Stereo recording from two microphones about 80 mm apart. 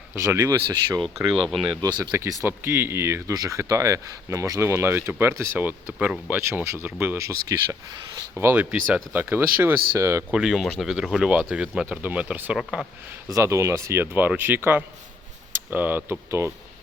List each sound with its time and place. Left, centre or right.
0.2 s speech: right
1.0 s speech: centre
1.8 s speech: right
2.1 s speech: right
3.3 s speech: right
4.7 s speech: right
5.5 s speech: right
6.5 s speech: right
7.2 s speech: right
9.1 s speech: right
10.0 s speech: right
10.3 s speech: centre
12.5 s speech: centre
13.2 s speech: right